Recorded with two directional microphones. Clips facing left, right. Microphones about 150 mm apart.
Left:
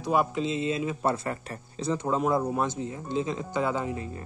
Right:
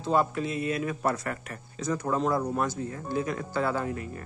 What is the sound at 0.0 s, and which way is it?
A man's voice, 15° left (ahead or behind).